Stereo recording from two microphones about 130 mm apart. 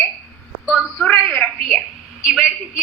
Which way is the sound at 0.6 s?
5° right (ahead or behind).